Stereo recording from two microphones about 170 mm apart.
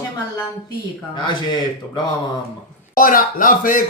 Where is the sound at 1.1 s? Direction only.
25° left (ahead or behind).